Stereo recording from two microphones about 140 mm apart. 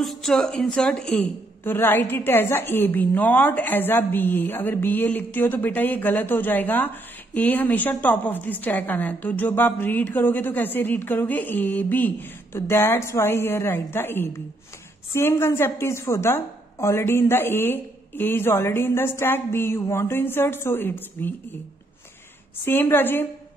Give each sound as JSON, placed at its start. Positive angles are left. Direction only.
{"t": 0.0, "sound": "a woman's voice", "side_deg": 0}
{"t": 22.7, "sound": "a woman's voice", "side_deg": 15}